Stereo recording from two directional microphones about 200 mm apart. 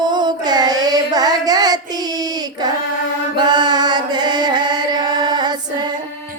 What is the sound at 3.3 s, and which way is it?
Music, 20° right (ahead or behind).